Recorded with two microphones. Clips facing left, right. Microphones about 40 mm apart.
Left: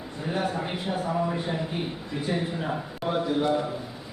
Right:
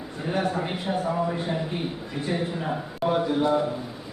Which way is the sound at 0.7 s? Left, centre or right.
Centre.